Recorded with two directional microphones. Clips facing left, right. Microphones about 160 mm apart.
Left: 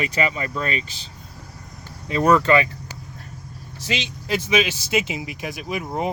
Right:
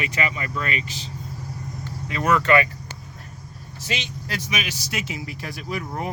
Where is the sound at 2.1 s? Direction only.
35° left (ahead or behind).